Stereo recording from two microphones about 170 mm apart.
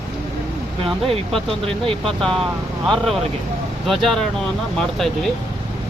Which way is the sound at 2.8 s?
Centre (ahead or behind).